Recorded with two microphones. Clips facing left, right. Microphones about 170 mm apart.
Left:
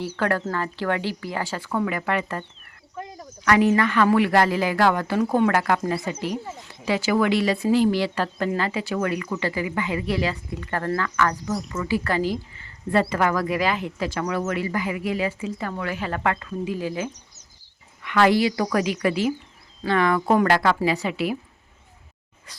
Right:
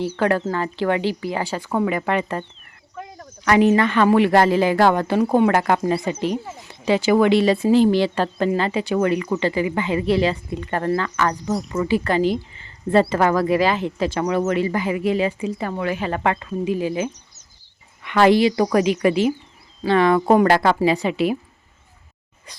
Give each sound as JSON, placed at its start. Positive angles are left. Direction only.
{"t": 0.0, "sound": "speech", "side_deg": -20}